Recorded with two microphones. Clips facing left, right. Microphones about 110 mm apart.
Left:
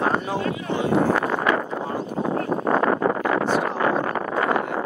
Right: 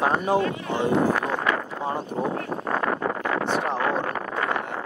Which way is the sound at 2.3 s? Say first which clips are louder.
Left 6 dB; 35° left (ahead or behind).